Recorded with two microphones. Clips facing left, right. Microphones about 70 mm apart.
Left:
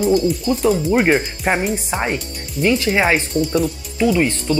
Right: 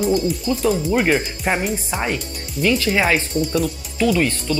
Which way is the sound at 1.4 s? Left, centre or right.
Centre.